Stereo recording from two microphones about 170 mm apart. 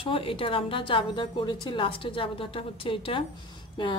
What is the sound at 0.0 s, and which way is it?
A woman's voice, 30° left (ahead or behind).